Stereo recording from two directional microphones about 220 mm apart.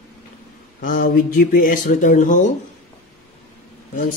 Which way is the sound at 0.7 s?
40° left (ahead or behind).